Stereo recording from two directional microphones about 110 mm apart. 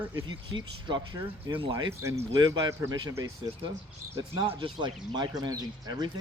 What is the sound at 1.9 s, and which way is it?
Speech, 25° right (ahead or behind).